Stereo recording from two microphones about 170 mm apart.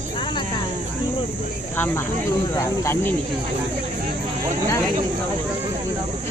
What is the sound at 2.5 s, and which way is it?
Speech, 15° left (ahead or behind).